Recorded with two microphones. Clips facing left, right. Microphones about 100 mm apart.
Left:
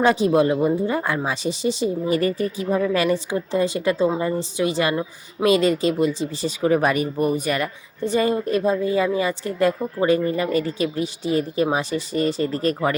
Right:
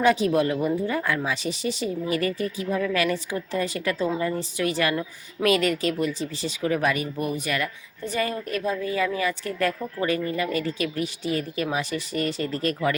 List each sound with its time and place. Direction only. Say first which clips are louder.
0.0 s speech: left 3 dB; 30° left (ahead or behind)
7.6 s speech: left 5 dB; 30° left (ahead or behind)